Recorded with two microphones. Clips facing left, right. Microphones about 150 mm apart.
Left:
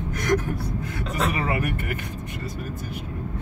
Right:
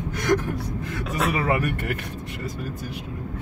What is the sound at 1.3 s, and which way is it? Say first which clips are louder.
Speech: right 4 dB; 75° right (ahead or behind).